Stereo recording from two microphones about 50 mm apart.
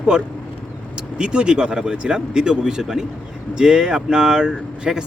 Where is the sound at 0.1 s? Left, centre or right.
Centre.